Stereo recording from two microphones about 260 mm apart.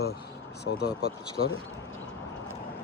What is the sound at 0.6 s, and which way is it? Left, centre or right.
Speech, left.